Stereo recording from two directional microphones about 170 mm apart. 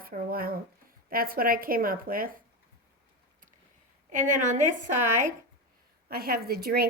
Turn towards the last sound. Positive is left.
turn(degrees=-65)  # may be behind; listen again after turning